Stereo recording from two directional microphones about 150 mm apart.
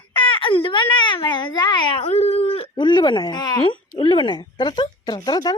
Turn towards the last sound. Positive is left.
turn(degrees=30)  # may be behind; listen again after turning